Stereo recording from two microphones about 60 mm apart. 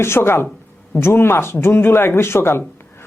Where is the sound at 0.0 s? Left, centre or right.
Left.